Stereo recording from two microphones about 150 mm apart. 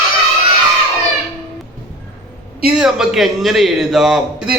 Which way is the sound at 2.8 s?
5° right (ahead or behind).